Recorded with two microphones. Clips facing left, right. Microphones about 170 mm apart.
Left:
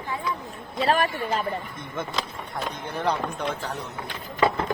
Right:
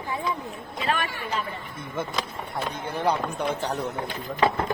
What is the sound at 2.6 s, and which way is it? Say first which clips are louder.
Speech: right 1 dB; 10° right (ahead or behind).